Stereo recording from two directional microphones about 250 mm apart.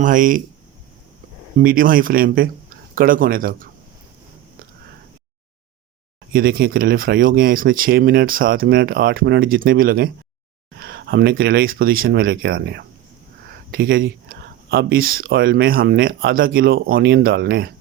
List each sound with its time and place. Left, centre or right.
0.0 s speech: right
1.6 s speech: right
6.3 s speech: right